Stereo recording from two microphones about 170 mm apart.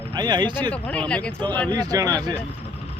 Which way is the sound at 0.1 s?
25° right (ahead or behind).